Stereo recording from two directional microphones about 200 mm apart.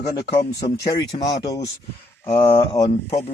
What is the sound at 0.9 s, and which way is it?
Speech, 20° left (ahead or behind).